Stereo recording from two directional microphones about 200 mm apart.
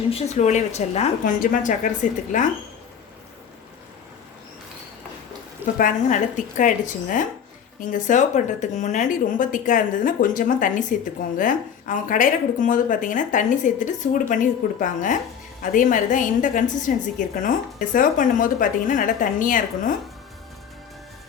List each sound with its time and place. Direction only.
0.1 s a woman's voice: 30° left (ahead or behind)
5.7 s a woman's voice: 40° left (ahead or behind)